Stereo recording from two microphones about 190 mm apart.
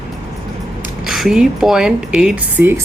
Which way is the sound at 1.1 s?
Centre (ahead or behind).